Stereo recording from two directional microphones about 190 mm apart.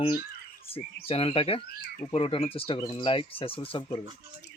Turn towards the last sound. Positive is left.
turn(degrees=30)  # may be behind; listen again after turning